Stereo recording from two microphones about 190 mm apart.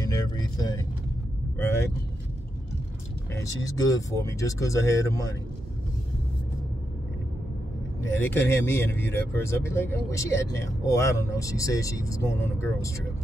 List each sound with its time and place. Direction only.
0.0 s vehicle: 20° left (ahead or behind)
1.6 s speech: 15° left (ahead or behind)
3.3 s speech: 15° left (ahead or behind)
8.0 s speech: 10° left (ahead or behind)